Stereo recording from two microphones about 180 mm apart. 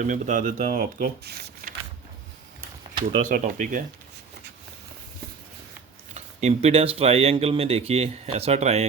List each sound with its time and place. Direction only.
0.0 s speech: 45° right (ahead or behind); by 1.7 s 65° right (ahead or behind)
3.2 s speech: 45° right (ahead or behind)
6.1 s speech: 40° right (ahead or behind)